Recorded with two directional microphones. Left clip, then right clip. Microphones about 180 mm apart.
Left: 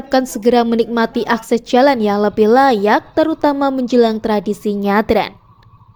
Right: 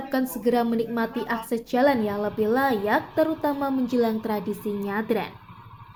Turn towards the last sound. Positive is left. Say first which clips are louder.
# left 12 dB
turn(degrees=65)  # may be behind; listen again after turning